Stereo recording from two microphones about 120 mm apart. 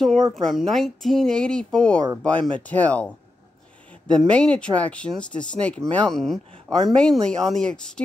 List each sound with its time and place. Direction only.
0.0 s speech: 5° left (ahead or behind)
4.1 s speech: 5° left (ahead or behind)